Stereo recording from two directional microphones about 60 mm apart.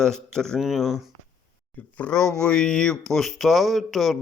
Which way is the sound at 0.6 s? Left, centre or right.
Centre.